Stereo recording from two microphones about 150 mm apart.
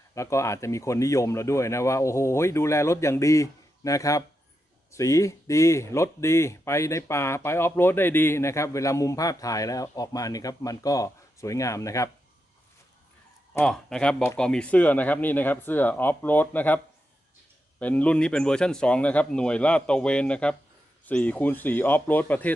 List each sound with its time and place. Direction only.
0.1 s speech: 20° left (ahead or behind)
13.5 s a man's voice: 5° left (ahead or behind)